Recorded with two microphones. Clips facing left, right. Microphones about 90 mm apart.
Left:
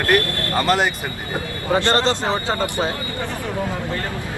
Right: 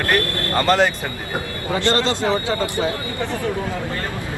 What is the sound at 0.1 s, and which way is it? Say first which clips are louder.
Speech: left 2 dB; 20° left (ahead or behind).